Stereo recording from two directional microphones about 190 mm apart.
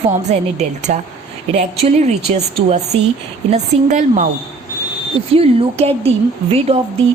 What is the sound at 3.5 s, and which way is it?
Speech, 40° right (ahead or behind).